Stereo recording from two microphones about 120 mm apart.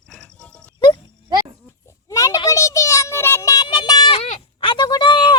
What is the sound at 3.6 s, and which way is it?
Child singing, 40° left (ahead or behind).